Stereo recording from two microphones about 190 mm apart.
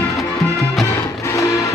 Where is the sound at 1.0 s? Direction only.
15° left (ahead or behind).